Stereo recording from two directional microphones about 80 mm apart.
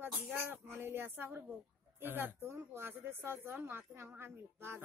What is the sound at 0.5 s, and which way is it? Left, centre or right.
A child's voice, right.